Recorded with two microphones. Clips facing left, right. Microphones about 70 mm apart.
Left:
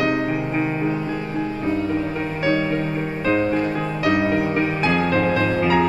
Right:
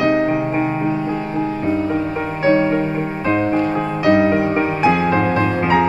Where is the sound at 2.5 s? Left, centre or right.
Right.